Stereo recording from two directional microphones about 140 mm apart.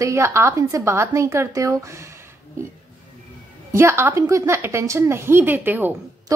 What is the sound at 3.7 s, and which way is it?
A woman's voice, 15° right (ahead or behind).